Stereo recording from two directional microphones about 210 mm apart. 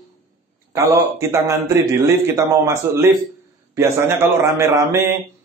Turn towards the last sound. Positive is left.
turn(degrees=-15)  # may be behind; listen again after turning